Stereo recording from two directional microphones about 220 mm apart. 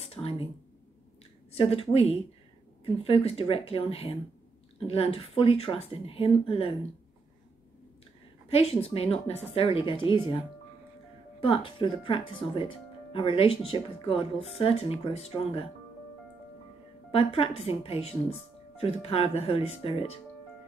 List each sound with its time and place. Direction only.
0.0 s a sound: 25° left (ahead or behind)
1.5 s speech: 25° left (ahead or behind)
8.5 s speech: 25° left (ahead or behind)
11.4 s speech: 25° left (ahead or behind)
17.1 s speech: 25° left (ahead or behind)